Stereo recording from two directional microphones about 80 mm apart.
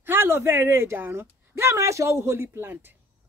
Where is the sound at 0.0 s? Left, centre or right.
Right.